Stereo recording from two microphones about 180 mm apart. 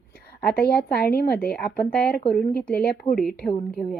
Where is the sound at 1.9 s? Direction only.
5° left (ahead or behind).